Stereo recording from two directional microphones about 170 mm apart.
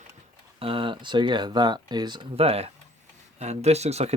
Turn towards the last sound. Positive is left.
turn(degrees=-40)  # may be behind; listen again after turning